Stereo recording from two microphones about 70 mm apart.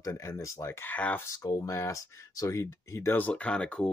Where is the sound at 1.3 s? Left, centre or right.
Left.